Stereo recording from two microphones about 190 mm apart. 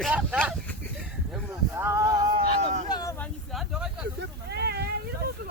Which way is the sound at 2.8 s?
20° left (ahead or behind).